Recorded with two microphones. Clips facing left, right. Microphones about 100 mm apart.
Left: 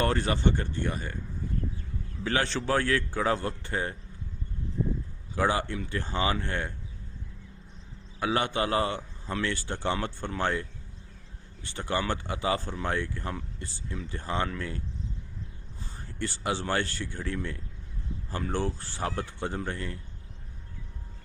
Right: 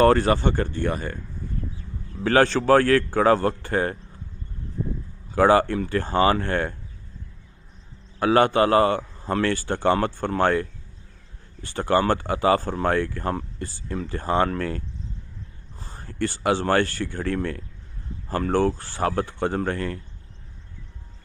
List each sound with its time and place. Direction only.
0.0 s speech: 60° right (ahead or behind)
2.2 s a man's voice: 50° right (ahead or behind)
5.3 s speech: 65° right (ahead or behind)
8.2 s speech: 55° right (ahead or behind)
15.8 s speech: 55° right (ahead or behind); by 17.6 s 70° right (ahead or behind)
18.3 s speech: 60° right (ahead or behind)